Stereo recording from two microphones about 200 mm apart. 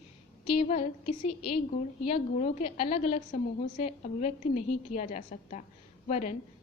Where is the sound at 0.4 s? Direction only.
30° left (ahead or behind).